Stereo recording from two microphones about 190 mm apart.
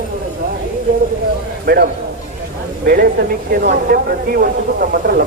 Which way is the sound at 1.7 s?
55° right (ahead or behind).